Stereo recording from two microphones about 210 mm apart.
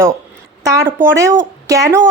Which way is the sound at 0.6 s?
15° right (ahead or behind).